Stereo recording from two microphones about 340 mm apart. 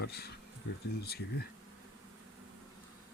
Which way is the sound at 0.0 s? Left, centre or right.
Left.